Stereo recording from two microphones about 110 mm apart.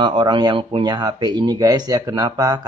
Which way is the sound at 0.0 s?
45° right (ahead or behind).